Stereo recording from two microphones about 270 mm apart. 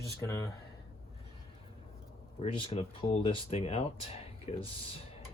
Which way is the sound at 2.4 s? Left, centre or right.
Left.